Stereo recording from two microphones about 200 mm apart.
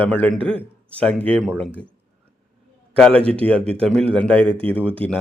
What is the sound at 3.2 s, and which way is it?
Speech, 30° right (ahead or behind).